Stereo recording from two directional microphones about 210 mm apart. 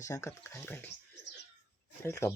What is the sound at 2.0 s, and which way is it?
Speech, 15° left (ahead or behind).